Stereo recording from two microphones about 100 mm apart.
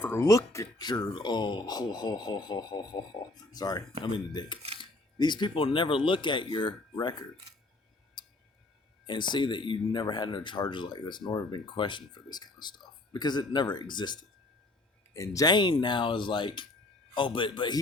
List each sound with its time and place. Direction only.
0.0 s a sound: 20° left (ahead or behind)
0.3 s speech: 35° left (ahead or behind); by 4.5 s 50° left (ahead or behind)
4.8 s camera: 50° left (ahead or behind)
5.6 s speech: 55° left (ahead or behind)
8.2 s a sound: 50° left (ahead or behind)
9.0 s speech: 50° left (ahead or behind)
15.1 s speech: 30° left (ahead or behind)
15.5 s a man's voice: 50° left (ahead or behind)